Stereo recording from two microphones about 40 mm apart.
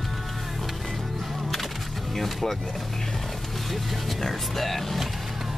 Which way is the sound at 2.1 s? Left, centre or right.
Centre.